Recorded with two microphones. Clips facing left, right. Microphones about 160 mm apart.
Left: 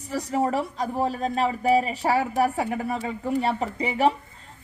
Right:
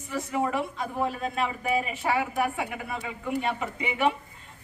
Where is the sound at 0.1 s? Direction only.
40° left (ahead or behind).